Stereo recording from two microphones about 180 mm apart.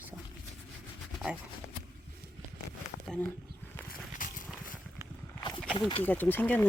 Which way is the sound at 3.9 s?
50° left (ahead or behind).